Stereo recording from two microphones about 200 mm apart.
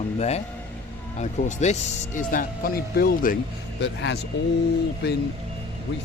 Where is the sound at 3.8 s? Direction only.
60° left (ahead or behind).